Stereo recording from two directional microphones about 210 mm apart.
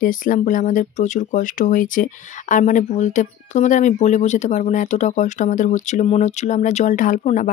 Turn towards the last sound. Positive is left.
turn(degrees=35)  # may be behind; listen again after turning